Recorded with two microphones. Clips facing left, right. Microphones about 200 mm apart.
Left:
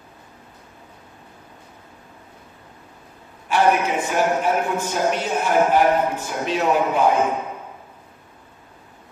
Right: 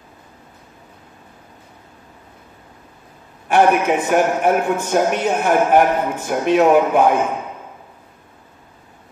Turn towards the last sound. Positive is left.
turn(degrees=-55)  # may be behind; listen again after turning